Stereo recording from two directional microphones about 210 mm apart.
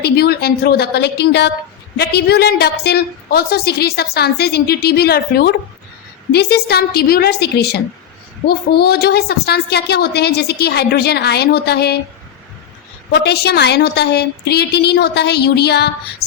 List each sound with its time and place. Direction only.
0.0 s a woman's voice: 50° left (ahead or behind)
13.1 s a woman's voice: 50° left (ahead or behind)